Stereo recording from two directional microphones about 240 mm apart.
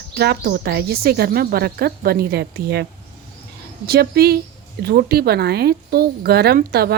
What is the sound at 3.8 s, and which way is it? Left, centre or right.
A woman's voice, right.